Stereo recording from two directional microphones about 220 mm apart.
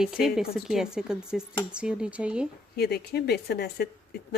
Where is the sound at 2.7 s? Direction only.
45° left (ahead or behind).